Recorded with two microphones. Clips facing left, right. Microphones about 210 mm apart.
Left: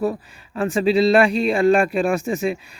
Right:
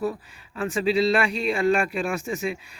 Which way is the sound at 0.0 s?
50° left (ahead or behind).